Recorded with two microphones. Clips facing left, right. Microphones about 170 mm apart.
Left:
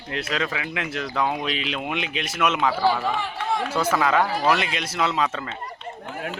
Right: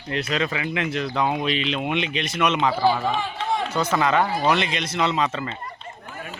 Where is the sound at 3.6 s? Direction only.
5° left (ahead or behind).